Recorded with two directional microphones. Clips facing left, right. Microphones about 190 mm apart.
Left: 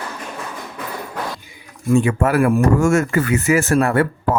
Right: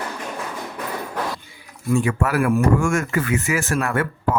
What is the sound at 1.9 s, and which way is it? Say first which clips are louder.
Speech: left 4 dB; 20° left (ahead or behind).